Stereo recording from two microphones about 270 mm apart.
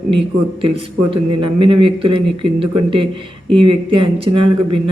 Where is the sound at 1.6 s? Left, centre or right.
Centre.